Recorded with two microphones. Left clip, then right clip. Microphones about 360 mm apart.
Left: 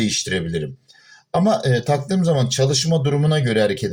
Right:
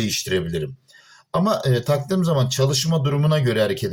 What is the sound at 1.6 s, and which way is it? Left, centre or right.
Speech, right.